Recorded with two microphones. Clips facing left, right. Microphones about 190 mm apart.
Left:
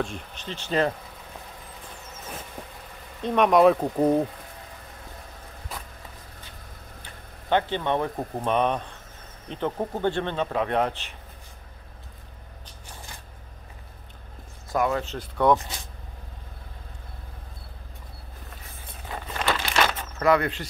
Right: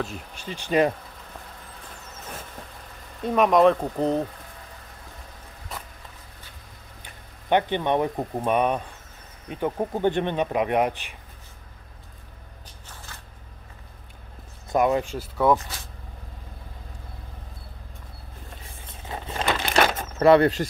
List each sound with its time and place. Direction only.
0.0 s speech: 5° right (ahead or behind)
3.2 s speech: 5° right (ahead or behind)
7.4 s speech: 15° right (ahead or behind)
12.8 s a sound: 15° left (ahead or behind)
14.7 s speech: 20° right (ahead or behind); by 15.6 s 5° right (ahead or behind)
19.0 s a sound: 25° right (ahead or behind)